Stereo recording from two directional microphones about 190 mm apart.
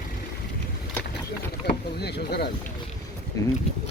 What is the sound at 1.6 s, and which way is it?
Boat, 55° left (ahead or behind).